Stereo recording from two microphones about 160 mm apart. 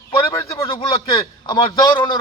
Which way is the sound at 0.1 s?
20° left (ahead or behind).